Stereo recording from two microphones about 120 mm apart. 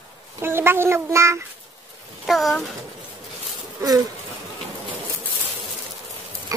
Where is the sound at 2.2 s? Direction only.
Centre (ahead or behind).